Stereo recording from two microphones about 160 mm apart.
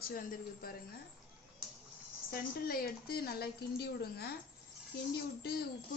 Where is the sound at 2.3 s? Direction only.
70° left (ahead or behind).